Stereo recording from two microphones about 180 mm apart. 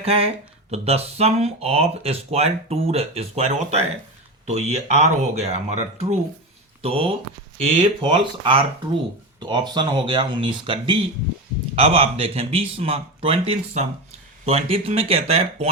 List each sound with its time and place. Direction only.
0.0 s speech: 35° right (ahead or behind)